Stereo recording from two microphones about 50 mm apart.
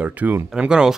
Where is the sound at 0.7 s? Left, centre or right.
Centre.